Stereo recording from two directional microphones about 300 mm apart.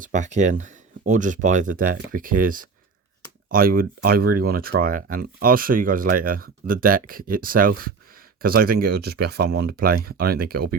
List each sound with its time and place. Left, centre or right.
0.0 s speech: right